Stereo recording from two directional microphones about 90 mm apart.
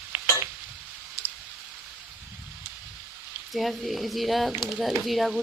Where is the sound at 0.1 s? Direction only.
20° right (ahead or behind).